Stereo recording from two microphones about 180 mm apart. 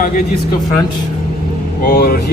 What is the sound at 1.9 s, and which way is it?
Speech, 55° left (ahead or behind).